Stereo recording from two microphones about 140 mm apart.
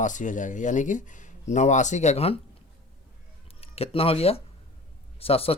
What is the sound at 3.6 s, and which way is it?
Speech, 45° left (ahead or behind).